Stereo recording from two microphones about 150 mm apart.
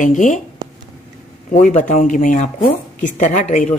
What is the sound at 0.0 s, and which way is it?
Speech, 60° left (ahead or behind).